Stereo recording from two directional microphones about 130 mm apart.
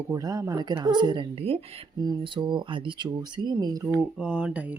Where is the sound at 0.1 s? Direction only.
25° right (ahead or behind).